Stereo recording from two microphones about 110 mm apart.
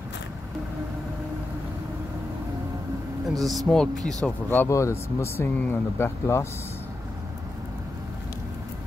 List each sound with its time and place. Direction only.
3.3 s speech: centre (ahead or behind)
4.5 s speech: 25° left (ahead or behind)